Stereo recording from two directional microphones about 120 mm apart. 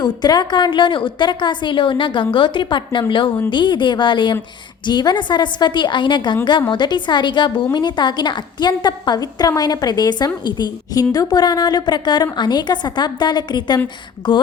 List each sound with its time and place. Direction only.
0.0 s a woman's voice: 35° left (ahead or behind)